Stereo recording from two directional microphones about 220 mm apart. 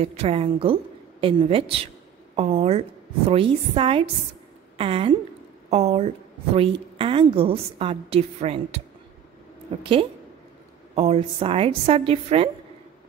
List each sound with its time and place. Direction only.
0.0 s a woman's voice: 25° right (ahead or behind)
2.3 s a sound: 25° right (ahead or behind)
3.3 s a woman's voice: 25° right (ahead or behind)
11.0 s a woman's voice: 25° right (ahead or behind)